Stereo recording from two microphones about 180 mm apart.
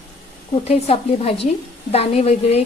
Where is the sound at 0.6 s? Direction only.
35° left (ahead or behind).